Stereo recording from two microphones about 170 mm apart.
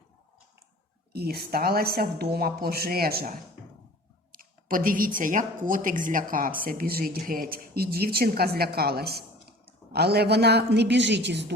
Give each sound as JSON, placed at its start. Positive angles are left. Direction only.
{"t": 1.1, "sound": "a woman's voice", "side_deg": -70}